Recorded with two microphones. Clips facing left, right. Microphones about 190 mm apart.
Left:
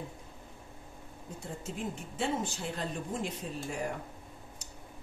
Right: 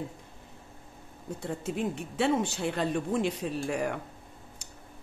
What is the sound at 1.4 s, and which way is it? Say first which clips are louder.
Speech: right 7 dB; 70° right (ahead or behind).